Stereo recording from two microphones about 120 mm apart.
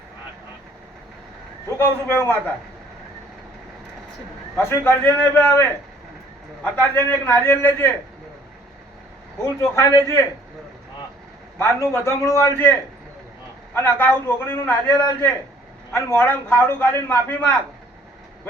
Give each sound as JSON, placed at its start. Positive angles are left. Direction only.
{"t": 1.8, "sound": "a man's voice", "side_deg": 20}
{"t": 4.5, "sound": "a man's voice", "side_deg": 20}
{"t": 6.7, "sound": "a man's voice", "side_deg": 20}
{"t": 9.6, "sound": "a man's voice", "side_deg": 25}
{"t": 11.5, "sound": "a man's voice", "side_deg": 25}
{"t": 13.7, "sound": "a man's voice", "side_deg": 20}